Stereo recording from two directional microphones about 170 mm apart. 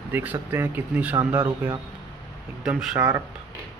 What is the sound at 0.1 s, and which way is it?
Speech, 10° right (ahead or behind).